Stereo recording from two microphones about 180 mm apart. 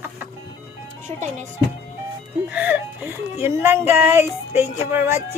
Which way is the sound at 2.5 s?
10° right (ahead or behind).